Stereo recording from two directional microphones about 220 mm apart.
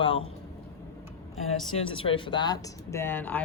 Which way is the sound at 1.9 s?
25° left (ahead or behind).